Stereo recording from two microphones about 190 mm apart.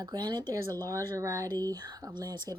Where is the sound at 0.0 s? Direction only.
20° right (ahead or behind).